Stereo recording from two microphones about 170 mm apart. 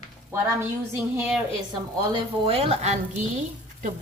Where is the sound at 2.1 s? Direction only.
30° right (ahead or behind).